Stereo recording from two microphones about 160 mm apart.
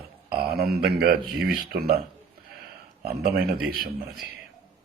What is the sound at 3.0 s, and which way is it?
Speech, 70° right (ahead or behind).